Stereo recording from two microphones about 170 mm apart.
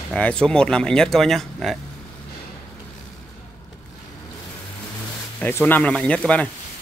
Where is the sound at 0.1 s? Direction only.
5° left (ahead or behind).